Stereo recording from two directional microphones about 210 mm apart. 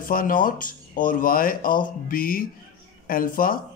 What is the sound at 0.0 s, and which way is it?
Speech, 40° left (ahead or behind).